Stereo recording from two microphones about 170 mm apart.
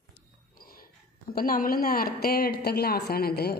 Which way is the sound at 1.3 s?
60° left (ahead or behind).